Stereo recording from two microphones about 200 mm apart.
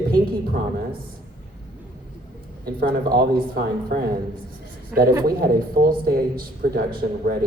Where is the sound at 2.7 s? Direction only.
50° right (ahead or behind).